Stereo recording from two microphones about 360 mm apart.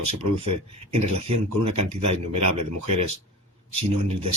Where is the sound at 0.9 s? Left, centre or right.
Right.